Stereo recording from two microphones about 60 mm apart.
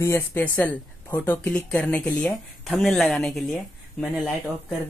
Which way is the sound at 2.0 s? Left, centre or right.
Left.